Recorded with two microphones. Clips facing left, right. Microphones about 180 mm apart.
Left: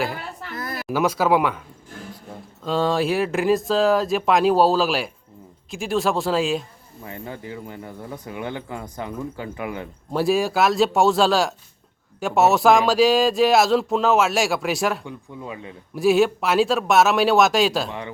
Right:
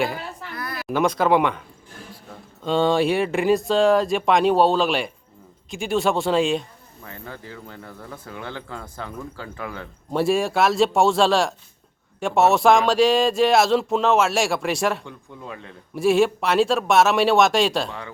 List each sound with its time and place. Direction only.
0.9 s a man's voice: 5° left (ahead or behind)
2.6 s a man's voice: centre (ahead or behind)
7.0 s speech: 15° left (ahead or behind)
10.1 s a man's voice: centre (ahead or behind)